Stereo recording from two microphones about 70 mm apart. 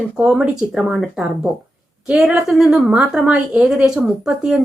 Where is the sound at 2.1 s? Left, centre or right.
Centre.